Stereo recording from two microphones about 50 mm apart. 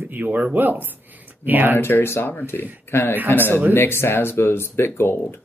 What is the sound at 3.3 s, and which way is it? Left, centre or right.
Speech, left.